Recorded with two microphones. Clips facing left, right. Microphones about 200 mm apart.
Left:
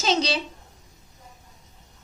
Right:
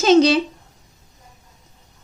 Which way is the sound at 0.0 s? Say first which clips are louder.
Right 11 dB; 50° right (ahead or behind).